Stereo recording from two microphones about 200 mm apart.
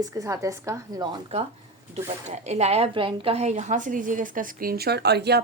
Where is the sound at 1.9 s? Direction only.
35° right (ahead or behind).